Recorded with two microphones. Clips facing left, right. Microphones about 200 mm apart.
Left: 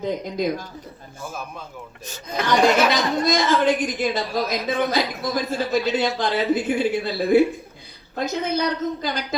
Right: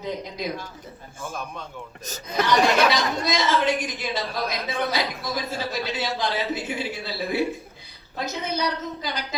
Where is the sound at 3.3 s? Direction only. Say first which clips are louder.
Left 3 dB; 50° left (ahead or behind).